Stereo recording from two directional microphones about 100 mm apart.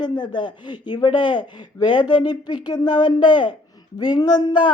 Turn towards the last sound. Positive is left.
turn(degrees=50)  # may be behind; listen again after turning